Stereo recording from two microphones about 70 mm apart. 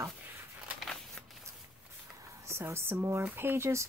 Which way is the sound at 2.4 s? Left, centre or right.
Right.